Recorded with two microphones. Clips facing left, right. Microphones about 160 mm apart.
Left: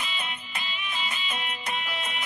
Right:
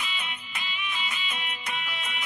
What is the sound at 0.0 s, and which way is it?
Music, 40° left (ahead or behind).